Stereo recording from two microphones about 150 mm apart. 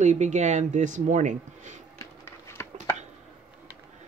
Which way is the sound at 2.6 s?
15° left (ahead or behind).